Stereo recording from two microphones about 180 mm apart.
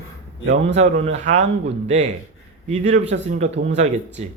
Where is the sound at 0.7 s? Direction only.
40° right (ahead or behind).